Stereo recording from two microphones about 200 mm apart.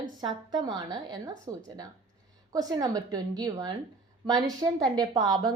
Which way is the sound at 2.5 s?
20° right (ahead or behind).